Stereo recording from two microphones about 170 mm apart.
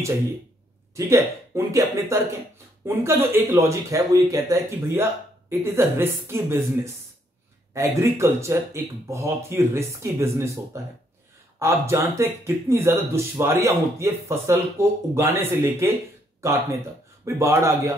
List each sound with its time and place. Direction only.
0.9 s speech: 15° right (ahead or behind)